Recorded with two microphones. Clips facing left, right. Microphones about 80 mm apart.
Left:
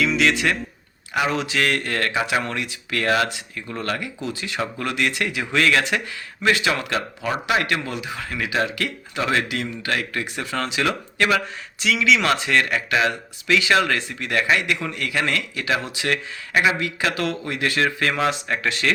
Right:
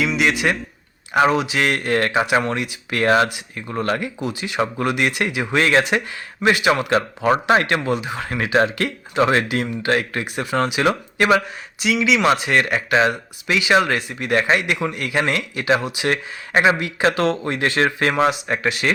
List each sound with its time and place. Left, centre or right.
0.2 s speech: centre
1.1 s speech: right
1.4 s speech: centre
7.2 s speech: right; by 11.9 s centre
11.9 s speech: centre
12.3 s speech: right
18.1 s speech: right